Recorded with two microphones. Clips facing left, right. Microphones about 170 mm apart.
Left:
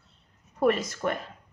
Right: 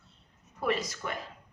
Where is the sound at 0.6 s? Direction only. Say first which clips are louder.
Left 7 dB; 50° left (ahead or behind).